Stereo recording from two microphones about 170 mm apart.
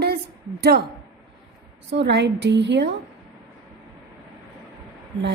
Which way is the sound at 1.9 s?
90° right.